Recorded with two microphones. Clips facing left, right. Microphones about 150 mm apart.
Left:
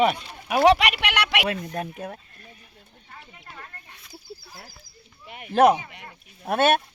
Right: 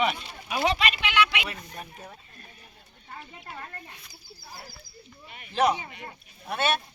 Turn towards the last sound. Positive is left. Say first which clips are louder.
# left 7 dB
turn(degrees=55)  # may be behind; listen again after turning